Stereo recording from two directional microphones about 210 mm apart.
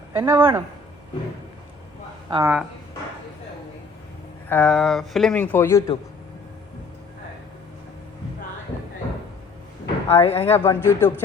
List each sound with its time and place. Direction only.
0.1 s speech: 10° right (ahead or behind)
2.3 s speech: 15° right (ahead or behind)
4.4 s speech: 5° left (ahead or behind)
10.1 s speech: 25° left (ahead or behind)
10.4 s speech: 10° left (ahead or behind)